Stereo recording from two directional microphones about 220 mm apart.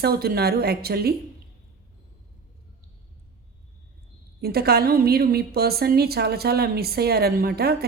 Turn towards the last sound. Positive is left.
turn(degrees=-45)  # may be behind; listen again after turning